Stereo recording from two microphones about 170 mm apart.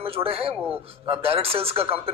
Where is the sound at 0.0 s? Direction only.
35° right (ahead or behind).